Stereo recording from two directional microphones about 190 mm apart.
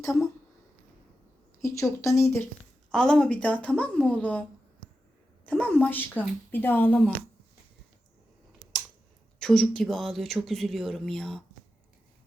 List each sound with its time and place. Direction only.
1.6 s a woman's voice: 15° left (ahead or behind)
2.9 s a woman's voice: 5° left (ahead or behind)
5.5 s a woman's voice: 5° left (ahead or behind)
9.4 s speech: 5° left (ahead or behind)